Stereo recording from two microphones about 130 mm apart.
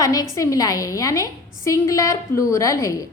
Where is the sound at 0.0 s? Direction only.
25° left (ahead or behind).